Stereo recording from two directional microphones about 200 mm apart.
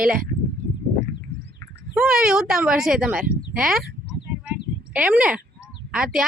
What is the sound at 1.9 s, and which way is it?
A woman's voice, 5° right (ahead or behind).